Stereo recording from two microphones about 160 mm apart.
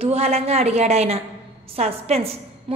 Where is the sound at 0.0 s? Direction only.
40° right (ahead or behind).